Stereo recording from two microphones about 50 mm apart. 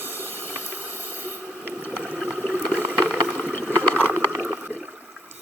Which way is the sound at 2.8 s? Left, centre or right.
Right.